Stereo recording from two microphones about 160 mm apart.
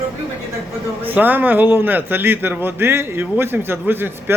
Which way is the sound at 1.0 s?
10° right (ahead or behind).